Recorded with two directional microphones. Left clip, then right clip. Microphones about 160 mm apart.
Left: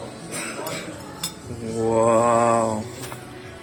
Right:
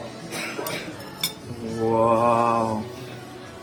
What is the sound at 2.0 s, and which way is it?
Mantra, 15° left (ahead or behind).